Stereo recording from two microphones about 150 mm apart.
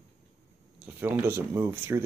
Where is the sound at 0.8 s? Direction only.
15° right (ahead or behind).